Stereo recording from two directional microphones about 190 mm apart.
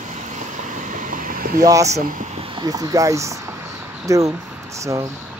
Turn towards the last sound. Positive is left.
turn(degrees=-15)  # may be behind; listen again after turning